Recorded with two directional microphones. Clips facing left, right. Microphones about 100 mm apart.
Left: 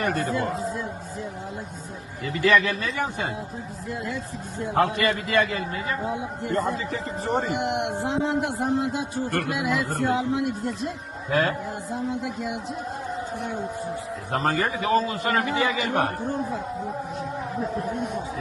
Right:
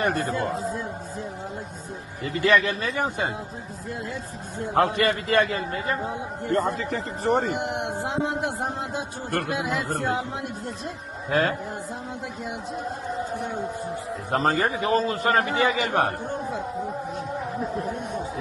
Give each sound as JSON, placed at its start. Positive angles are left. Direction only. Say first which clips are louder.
{"t": 0.1, "sound": "a man's voice", "louder": "even", "side_deg": -35}
{"t": 2.3, "sound": "a man's voice", "louder": "even", "side_deg": -35}
{"t": 4.9, "sound": "a man's voice", "louder": "right 1 dB", "side_deg": -40}
{"t": 6.4, "sound": "a man's voice", "louder": "right 3 dB", "side_deg": -50}
{"t": 7.4, "sound": "a man's voice", "louder": "left 2 dB", "side_deg": -35}
{"t": 14.3, "sound": "a man's voice", "louder": "right 2 dB", "side_deg": -35}